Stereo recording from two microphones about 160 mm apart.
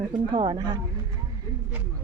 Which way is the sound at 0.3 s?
30° right (ahead or behind).